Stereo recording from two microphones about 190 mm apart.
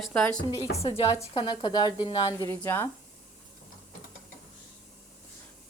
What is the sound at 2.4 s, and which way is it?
Speech, 10° left (ahead or behind).